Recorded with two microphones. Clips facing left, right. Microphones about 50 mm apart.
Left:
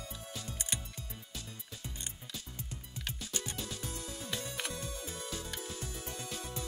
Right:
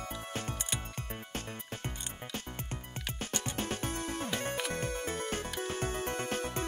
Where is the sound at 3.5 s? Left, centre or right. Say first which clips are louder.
Right 7 dB; right.